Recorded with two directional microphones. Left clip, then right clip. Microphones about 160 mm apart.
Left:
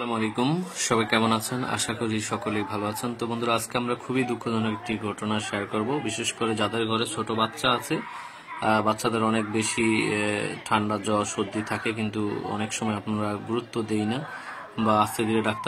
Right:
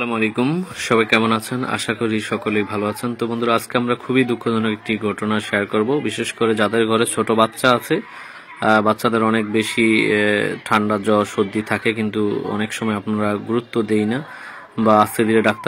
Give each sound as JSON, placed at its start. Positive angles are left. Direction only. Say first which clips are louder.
{"t": 0.1, "sound": "speech", "louder": "right 6 dB", "side_deg": -15}
{"t": 10.2, "sound": "speech", "louder": "right 9 dB", "side_deg": -25}